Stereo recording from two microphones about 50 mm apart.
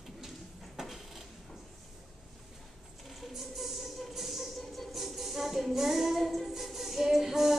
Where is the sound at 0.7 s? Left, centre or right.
Centre.